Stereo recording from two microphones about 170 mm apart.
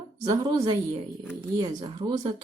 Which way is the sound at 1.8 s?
30° right (ahead or behind).